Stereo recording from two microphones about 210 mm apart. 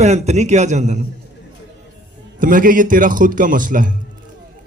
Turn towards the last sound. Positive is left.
turn(degrees=-40)  # may be behind; listen again after turning